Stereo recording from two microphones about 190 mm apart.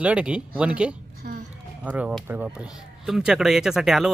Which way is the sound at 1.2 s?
50° right (ahead or behind).